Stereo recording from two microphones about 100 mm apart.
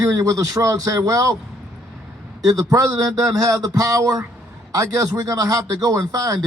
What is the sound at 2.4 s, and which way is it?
Speech, 35° right (ahead or behind).